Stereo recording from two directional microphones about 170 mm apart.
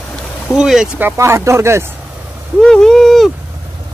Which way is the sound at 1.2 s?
15° right (ahead or behind).